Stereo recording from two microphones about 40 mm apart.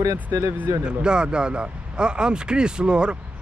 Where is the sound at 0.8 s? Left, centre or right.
Right.